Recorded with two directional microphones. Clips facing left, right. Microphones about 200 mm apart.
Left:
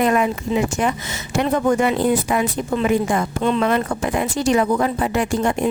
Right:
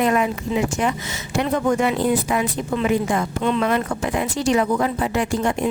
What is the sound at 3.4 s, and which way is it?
Speech, 35° left (ahead or behind).